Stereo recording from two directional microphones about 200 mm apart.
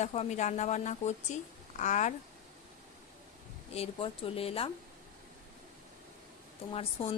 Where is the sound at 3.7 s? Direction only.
30° left (ahead or behind).